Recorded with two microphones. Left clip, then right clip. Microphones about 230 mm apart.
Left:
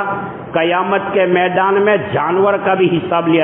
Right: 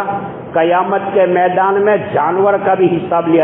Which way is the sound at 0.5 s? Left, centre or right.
Left.